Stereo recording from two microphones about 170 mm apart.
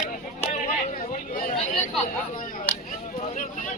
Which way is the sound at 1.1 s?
50° left (ahead or behind).